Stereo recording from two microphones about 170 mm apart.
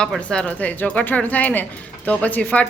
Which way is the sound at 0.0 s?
5° left (ahead or behind).